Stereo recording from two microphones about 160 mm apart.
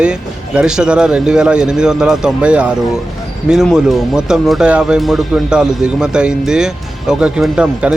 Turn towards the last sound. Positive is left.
turn(degrees=-5)  # may be behind; listen again after turning